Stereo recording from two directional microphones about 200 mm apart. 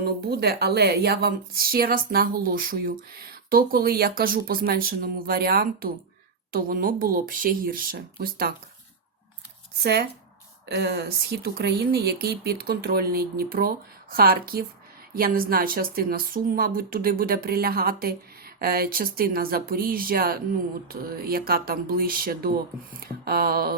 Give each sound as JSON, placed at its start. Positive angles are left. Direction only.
{"t": 0.0, "sound": "a woman's voice", "side_deg": -50}
{"t": 9.8, "sound": "a woman's voice", "side_deg": -55}